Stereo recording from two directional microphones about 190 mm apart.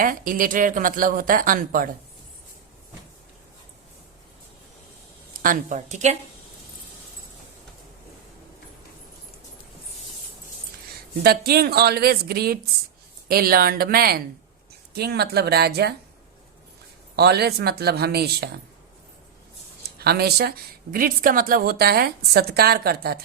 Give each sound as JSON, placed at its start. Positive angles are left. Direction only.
{"t": 0.0, "sound": "a woman's voice", "side_deg": -45}
{"t": 5.4, "sound": "a woman's voice", "side_deg": -45}
{"t": 11.2, "sound": "a woman's voice", "side_deg": -55}
{"t": 17.2, "sound": "speech", "side_deg": -55}
{"t": 20.0, "sound": "a woman's voice", "side_deg": -55}